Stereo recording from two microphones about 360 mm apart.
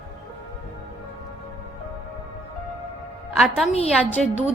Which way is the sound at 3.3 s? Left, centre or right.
Centre.